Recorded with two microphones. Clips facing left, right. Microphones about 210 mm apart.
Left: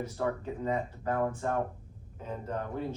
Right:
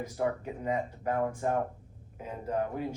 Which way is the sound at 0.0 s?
15° right (ahead or behind).